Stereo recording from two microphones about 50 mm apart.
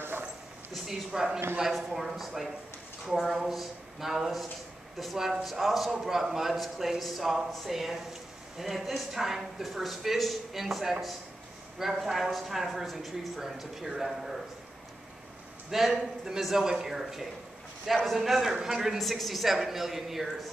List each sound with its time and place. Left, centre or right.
0.8 s a man's voice: centre
15.7 s a man's voice: centre